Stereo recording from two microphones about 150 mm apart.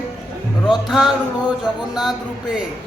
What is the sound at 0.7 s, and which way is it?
Speech, centre (ahead or behind).